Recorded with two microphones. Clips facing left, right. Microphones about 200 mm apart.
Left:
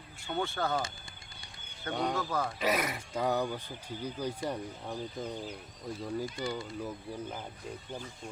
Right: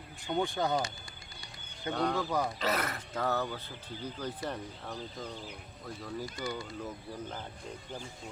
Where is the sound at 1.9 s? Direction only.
10° left (ahead or behind).